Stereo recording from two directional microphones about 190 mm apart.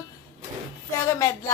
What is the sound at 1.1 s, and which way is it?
Speech, 15° left (ahead or behind).